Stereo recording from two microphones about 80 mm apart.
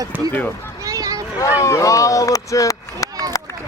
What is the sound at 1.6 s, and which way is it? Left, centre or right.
Speech, left.